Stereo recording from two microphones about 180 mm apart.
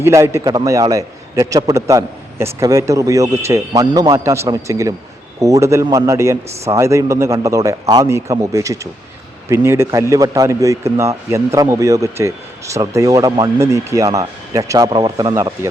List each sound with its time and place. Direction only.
0.0 s speech: 15° right (ahead or behind)